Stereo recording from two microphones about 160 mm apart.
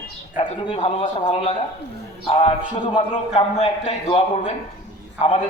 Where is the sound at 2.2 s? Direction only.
40° left (ahead or behind).